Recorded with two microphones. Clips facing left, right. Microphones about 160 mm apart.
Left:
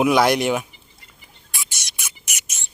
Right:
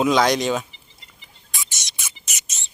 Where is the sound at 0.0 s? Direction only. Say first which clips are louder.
Left 1 dB; 10° left (ahead or behind).